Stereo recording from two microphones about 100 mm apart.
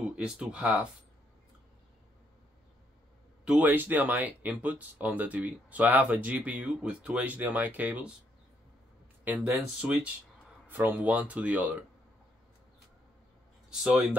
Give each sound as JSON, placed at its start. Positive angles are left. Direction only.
{"t": 0.1, "sound": "speech", "side_deg": -10}
{"t": 3.4, "sound": "speech", "side_deg": -15}
{"t": 9.2, "sound": "speech", "side_deg": -15}
{"t": 13.7, "sound": "speech", "side_deg": -5}